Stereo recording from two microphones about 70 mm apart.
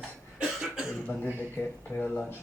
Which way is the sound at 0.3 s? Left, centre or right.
Centre.